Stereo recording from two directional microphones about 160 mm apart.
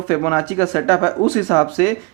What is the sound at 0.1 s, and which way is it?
Speech, 15° left (ahead or behind).